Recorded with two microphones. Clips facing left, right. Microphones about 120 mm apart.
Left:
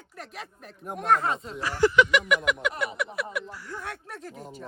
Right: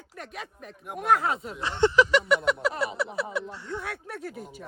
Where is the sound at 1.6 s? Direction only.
25° right (ahead or behind).